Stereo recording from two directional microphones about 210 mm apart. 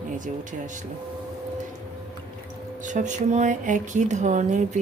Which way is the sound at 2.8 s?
35° right (ahead or behind).